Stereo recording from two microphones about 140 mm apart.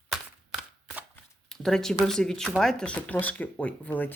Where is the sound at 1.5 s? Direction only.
5° left (ahead or behind).